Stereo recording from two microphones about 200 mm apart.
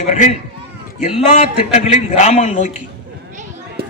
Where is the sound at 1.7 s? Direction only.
35° left (ahead or behind).